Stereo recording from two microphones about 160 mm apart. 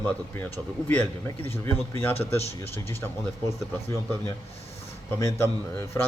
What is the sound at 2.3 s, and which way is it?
Speech, 40° left (ahead or behind).